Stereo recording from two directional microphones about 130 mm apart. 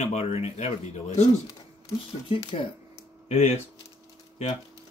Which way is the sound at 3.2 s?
60° left (ahead or behind).